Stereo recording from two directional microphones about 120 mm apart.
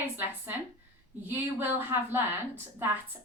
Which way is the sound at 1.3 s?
15° right (ahead or behind).